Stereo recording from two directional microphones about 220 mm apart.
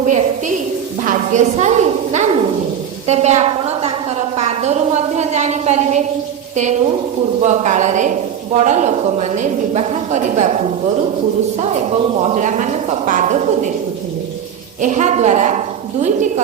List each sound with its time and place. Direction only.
0.1 s a woman's voice: 35° right (ahead or behind)
11.9 s a woman's voice: 30° right (ahead or behind)
14.8 s a woman's voice: 35° right (ahead or behind)